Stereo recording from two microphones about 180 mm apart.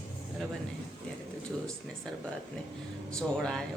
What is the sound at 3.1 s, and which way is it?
Speech, 5° left (ahead or behind).